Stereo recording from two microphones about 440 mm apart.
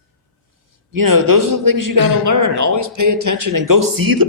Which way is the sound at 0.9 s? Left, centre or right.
Right.